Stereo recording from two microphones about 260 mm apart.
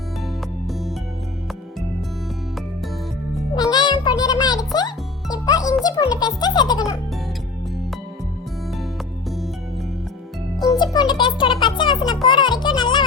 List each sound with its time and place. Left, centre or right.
3.5 s music: centre
5.8 s a child's voice: centre
10.6 s music: centre
12.2 s a child's voice: centre
12.6 s music: centre